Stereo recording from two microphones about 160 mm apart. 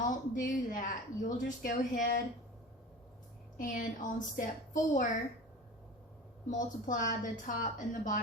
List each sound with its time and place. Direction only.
0.0 s a woman's voice: 55° left (ahead or behind)
3.6 s a woman's voice: 55° left (ahead or behind)
6.5 s a woman's voice: 55° left (ahead or behind)